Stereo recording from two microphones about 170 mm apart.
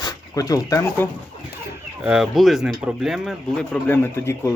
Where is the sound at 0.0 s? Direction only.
20° left (ahead or behind).